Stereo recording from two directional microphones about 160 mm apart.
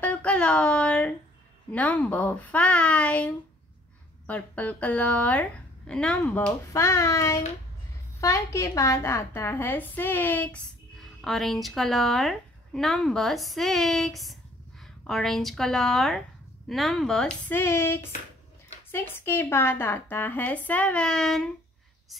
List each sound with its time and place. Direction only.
0.0 s a sound: 10° left (ahead or behind)
1.7 s a woman's voice: 10° left (ahead or behind)
6.7 s a woman's voice: 20° left (ahead or behind); by 21.5 s 5° left (ahead or behind)